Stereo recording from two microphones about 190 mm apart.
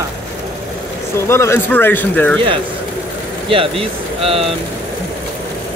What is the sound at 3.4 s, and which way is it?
Speech, 30° right (ahead or behind).